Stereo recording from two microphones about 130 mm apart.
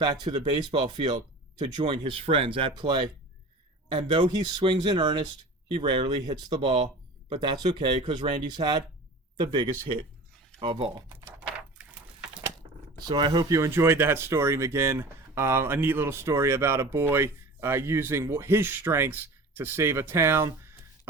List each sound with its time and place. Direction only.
0.0 s speech: 35° right (ahead or behind)
10.9 s speech: 25° right (ahead or behind)
13.1 s speech: 35° right (ahead or behind)